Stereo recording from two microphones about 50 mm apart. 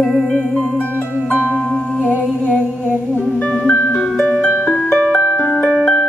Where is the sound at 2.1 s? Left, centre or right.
Left.